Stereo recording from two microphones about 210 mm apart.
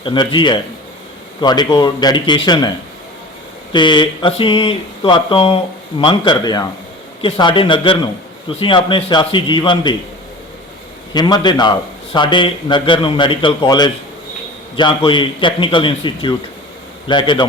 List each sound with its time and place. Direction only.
0.0 s speech: 25° left (ahead or behind)
11.1 s speech: 20° left (ahead or behind)